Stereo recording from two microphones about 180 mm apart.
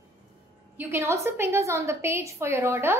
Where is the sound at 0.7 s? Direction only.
15° right (ahead or behind).